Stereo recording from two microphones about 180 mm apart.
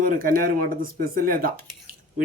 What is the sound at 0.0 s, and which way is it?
Speech, 50° right (ahead or behind).